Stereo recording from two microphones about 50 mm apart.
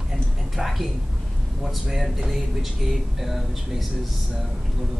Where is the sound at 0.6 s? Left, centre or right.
Centre.